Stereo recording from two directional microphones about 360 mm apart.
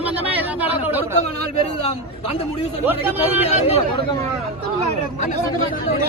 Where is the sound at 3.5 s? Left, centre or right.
Centre.